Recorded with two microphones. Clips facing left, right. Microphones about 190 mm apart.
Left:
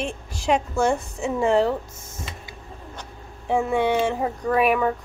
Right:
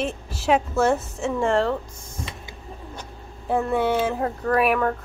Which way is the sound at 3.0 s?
5° right (ahead or behind).